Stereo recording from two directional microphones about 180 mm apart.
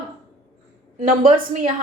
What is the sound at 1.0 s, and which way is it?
Speech, 50° right (ahead or behind).